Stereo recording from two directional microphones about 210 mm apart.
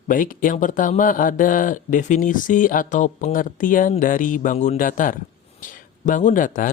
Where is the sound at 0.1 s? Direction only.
40° left (ahead or behind).